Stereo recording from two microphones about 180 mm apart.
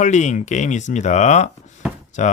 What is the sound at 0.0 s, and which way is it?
Speech, 40° left (ahead or behind).